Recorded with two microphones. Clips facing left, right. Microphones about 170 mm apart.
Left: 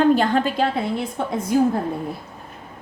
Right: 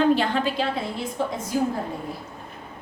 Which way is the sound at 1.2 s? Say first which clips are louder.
Right 3 dB; 60° left (ahead or behind).